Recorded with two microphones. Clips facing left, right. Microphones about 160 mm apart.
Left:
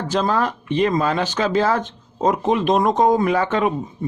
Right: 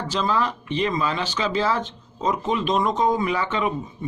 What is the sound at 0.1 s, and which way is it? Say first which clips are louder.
Speech: left 4 dB; 50° left (ahead or behind).